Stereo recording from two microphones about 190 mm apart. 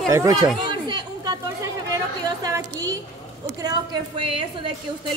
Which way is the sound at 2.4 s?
20° right (ahead or behind).